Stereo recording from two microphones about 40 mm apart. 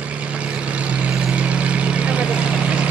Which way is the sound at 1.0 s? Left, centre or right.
Right.